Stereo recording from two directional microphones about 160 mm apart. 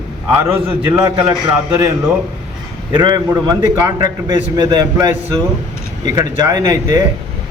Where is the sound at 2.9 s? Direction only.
25° right (ahead or behind).